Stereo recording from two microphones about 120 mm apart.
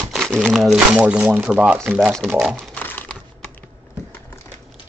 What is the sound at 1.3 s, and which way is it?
Speech, 5° right (ahead or behind).